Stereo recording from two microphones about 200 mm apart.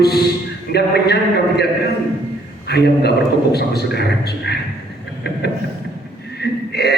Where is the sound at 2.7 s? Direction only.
55° left (ahead or behind).